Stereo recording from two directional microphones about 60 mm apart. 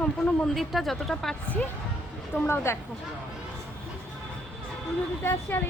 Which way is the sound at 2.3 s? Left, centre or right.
Left.